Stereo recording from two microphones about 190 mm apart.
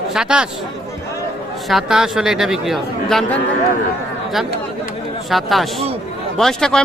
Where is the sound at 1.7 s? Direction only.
Centre (ahead or behind).